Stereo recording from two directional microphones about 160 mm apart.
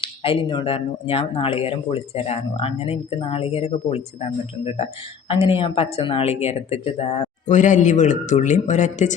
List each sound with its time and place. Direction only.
0.0 s speech: 35° left (ahead or behind)